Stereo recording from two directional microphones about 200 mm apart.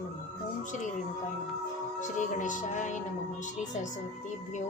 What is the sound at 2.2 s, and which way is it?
Speech, 40° left (ahead or behind).